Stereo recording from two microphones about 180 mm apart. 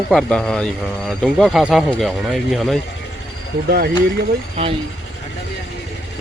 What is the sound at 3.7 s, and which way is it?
Speech, 55° right (ahead or behind).